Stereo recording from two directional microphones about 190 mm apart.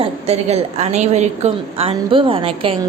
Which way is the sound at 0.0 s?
35° right (ahead or behind).